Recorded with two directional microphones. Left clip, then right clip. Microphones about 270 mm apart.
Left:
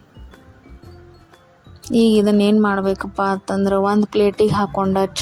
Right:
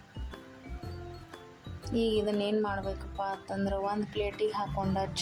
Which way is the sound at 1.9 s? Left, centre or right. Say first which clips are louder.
Left 14 dB; left.